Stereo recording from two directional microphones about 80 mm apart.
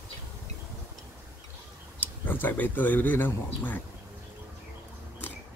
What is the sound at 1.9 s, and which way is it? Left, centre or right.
Speech, left.